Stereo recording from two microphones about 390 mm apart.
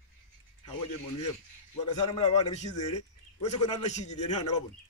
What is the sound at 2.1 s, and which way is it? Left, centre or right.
A man's voice, centre.